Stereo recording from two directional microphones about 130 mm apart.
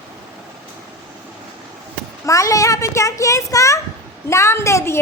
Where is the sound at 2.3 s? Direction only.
25° left (ahead or behind).